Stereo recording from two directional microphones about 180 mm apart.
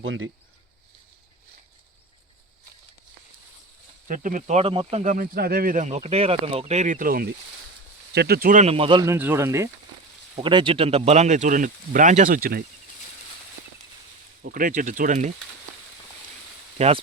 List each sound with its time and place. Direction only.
0.0 s speech: 90° right
4.1 s speech: 45° right (ahead or behind)
5.1 s speech: 55° right (ahead or behind)
8.6 s speech: 30° right (ahead or behind)
9.0 s speech: 10° right (ahead or behind)
10.3 s speech: 30° right (ahead or behind); by 12.6 s 55° right (ahead or behind)
14.4 s speech: 50° right (ahead or behind)
16.7 s speech: 35° right (ahead or behind)